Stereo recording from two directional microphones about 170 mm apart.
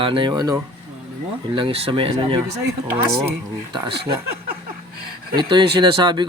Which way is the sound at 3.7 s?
30° right (ahead or behind).